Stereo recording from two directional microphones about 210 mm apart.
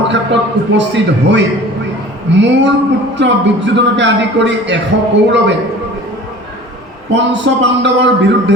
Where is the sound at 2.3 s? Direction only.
55° right (ahead or behind).